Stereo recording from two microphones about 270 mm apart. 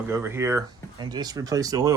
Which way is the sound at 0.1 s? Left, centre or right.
Centre.